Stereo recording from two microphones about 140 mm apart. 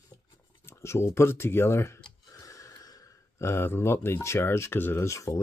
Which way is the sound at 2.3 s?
25° left (ahead or behind).